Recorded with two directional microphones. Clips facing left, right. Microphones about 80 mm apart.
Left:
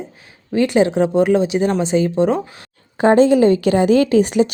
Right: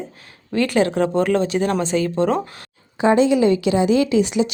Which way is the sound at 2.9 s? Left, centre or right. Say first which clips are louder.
Left 4 dB; left.